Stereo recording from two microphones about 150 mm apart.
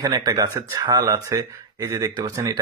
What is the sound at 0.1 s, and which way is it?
Speech, 25° right (ahead or behind).